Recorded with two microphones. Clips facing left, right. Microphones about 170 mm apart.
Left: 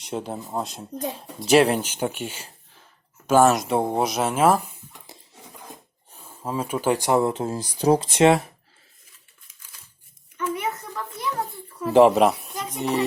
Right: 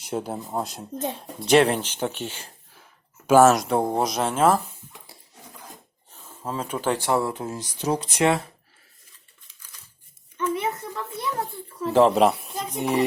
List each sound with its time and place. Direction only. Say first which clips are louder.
0.0 s speech: right 1 dB; centre (ahead or behind)
3.2 s speech: right 2 dB; 5° right (ahead or behind)
6.1 s speech: left 2 dB; 10° left (ahead or behind)
10.3 s a sound: right 1 dB; 30° right (ahead or behind)
11.9 s speech: left 3 dB; 15° left (ahead or behind)
12.1 s speech: even; centre (ahead or behind)
12.8 s music: right 1 dB; 15° right (ahead or behind)